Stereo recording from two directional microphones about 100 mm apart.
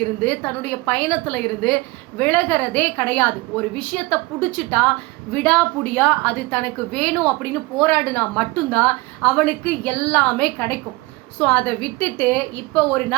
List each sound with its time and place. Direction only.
0.3 s a woman's voice: 15° left (ahead or behind)